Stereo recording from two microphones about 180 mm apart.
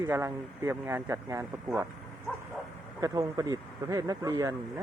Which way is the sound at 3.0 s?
15° right (ahead or behind).